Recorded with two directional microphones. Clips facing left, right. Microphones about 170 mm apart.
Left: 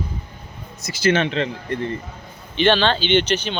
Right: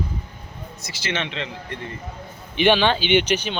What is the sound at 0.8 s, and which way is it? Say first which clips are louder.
Speech: left 10 dB; 45° left (ahead or behind).